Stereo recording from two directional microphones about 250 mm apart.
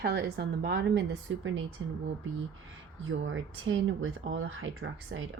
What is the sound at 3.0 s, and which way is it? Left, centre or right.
Speech, right.